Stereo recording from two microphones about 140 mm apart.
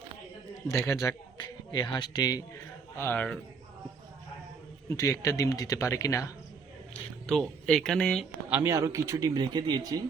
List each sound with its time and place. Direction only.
0.7 s speech: 20° left (ahead or behind)
3.0 s speech: 15° left (ahead or behind)
4.9 s speech: 20° left (ahead or behind)
7.3 s speech: 5° left (ahead or behind)
8.4 s a man's voice: 15° right (ahead or behind); by 10.0 s 30° right (ahead or behind)